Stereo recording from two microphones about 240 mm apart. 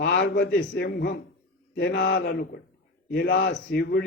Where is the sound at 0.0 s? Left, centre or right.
Left.